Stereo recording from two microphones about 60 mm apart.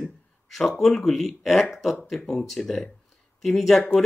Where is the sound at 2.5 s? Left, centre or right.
Centre.